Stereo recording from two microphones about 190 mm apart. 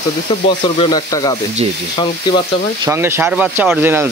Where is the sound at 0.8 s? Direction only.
20° left (ahead or behind).